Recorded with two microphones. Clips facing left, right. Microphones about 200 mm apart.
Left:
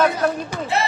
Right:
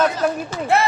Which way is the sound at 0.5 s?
15° left (ahead or behind).